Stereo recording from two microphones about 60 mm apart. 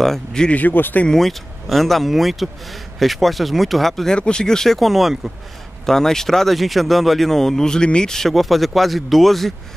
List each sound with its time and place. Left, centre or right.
0.0 s speech: centre
0.6 s a man's voice: left
1.0 s speech: centre
5.9 s speech: centre